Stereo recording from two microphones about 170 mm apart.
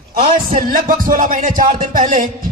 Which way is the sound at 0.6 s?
55° right (ahead or behind).